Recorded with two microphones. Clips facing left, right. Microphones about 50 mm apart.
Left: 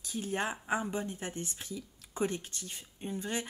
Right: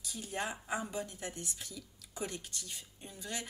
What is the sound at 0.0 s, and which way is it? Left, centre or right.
Speech, left.